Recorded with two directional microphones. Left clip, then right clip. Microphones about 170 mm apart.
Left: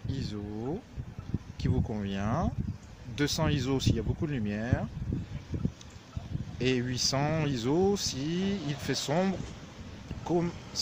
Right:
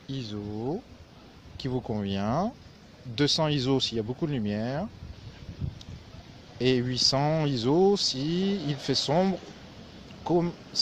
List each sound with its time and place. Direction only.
0.1 s speech: 25° right (ahead or behind)
6.6 s speech: 30° right (ahead or behind)